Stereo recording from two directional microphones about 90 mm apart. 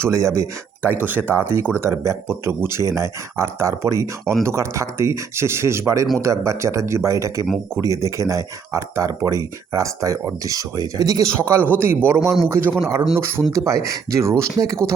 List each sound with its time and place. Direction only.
0.0 s speech: 35° right (ahead or behind)
0.8 s speech: 20° right (ahead or behind); by 11.3 s 45° right (ahead or behind)
11.3 s speech: 30° right (ahead or behind)
13.5 s speech: 40° right (ahead or behind)